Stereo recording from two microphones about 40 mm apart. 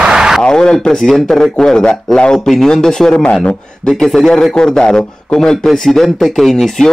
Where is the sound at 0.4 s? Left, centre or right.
Centre.